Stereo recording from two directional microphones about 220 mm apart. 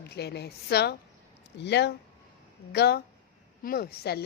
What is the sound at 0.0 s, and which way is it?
A woman's voice, 50° left (ahead or behind).